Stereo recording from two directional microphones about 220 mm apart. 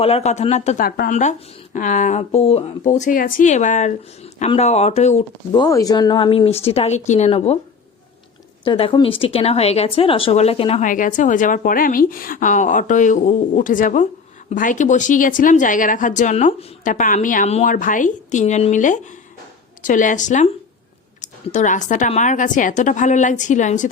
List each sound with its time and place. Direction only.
0.0 s speech: 30° left (ahead or behind)
0.9 s speech: 45° left (ahead or behind)
5.5 s speech: 15° left (ahead or behind)
8.6 s speech: 20° left (ahead or behind)